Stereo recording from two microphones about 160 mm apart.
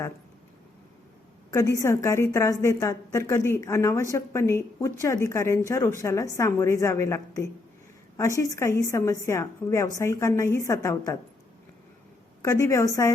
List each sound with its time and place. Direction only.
1.5 s a woman's voice: 20° left (ahead or behind)
12.4 s a woman's voice: 20° left (ahead or behind)